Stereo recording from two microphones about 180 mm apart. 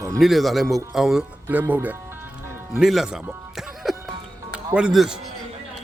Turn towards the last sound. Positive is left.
turn(degrees=-5)  # may be behind; listen again after turning